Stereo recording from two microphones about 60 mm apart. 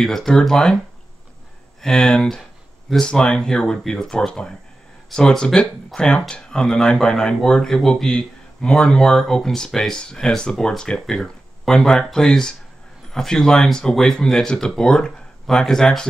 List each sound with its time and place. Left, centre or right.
0.0 s speech: centre
1.8 s speech: centre